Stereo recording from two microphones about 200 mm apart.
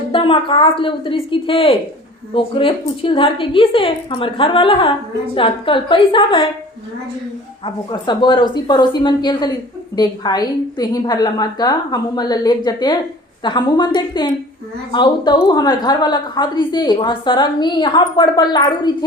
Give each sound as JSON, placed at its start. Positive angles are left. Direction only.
{"t": 0.1, "sound": "a woman's voice", "side_deg": 25}
{"t": 7.6, "sound": "a woman's voice", "side_deg": 20}